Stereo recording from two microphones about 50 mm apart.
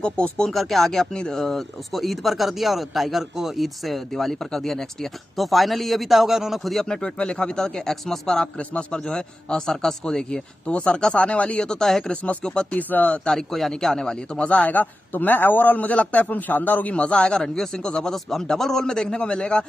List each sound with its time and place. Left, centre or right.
0.0 s speech: left
0.5 s speech: centre
7.0 s speech: centre
8.5 s speech: left
9.0 s speech: centre
11.6 s speech: centre
12.7 s a man's voice: left
13.2 s speech: centre
14.4 s a man's voice: left
16.9 s speech: left